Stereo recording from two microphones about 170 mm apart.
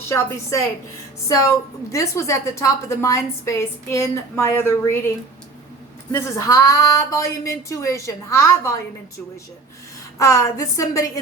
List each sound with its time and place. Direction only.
1.3 s a woman's voice: 20° left (ahead or behind)
6.1 s a woman's voice: 15° left (ahead or behind)
10.2 s a woman's voice: 20° left (ahead or behind)